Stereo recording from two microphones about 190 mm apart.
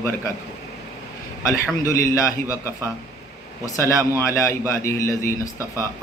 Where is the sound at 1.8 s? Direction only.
15° left (ahead or behind).